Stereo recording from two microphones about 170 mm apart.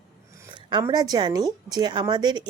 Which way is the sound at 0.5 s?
25° right (ahead or behind).